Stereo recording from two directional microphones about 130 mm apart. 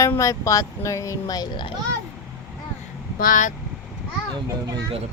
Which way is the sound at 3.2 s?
85° left.